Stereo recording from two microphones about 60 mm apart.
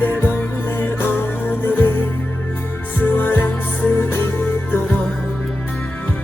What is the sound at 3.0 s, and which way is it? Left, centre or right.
Music, left.